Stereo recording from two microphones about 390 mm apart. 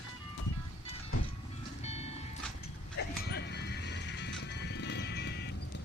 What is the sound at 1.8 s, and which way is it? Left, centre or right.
Music, centre.